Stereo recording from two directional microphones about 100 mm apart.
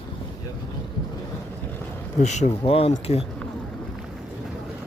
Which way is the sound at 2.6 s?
75° left (ahead or behind).